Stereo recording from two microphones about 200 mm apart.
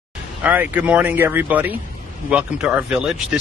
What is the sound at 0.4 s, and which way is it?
Speech, 10° right (ahead or behind).